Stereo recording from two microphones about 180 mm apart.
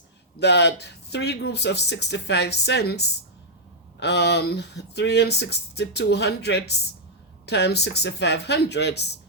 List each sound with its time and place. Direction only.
0.3 s speech: 70° left (ahead or behind)